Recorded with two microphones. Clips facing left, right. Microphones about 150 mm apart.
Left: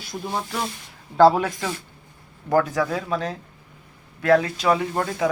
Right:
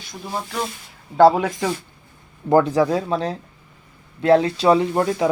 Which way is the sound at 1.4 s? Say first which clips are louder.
Right 3 dB; 15° right (ahead or behind).